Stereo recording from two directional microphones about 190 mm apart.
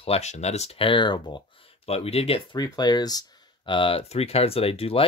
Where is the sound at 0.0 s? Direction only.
35° left (ahead or behind).